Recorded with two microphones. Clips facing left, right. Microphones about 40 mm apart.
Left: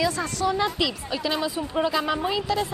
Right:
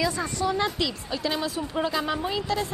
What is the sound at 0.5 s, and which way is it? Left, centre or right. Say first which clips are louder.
A woman's voice: left 3 dB; centre.